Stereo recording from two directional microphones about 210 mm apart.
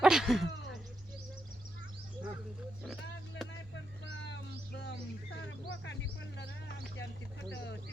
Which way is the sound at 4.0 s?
60° left (ahead or behind).